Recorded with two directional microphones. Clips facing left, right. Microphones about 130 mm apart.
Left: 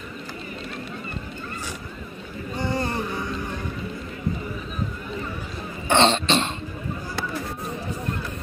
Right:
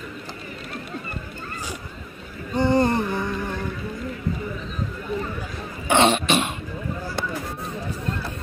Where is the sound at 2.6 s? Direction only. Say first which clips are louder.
Right 8 dB; 25° right (ahead or behind).